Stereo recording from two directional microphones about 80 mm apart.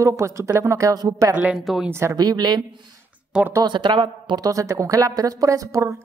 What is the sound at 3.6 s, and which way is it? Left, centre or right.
Speech, right.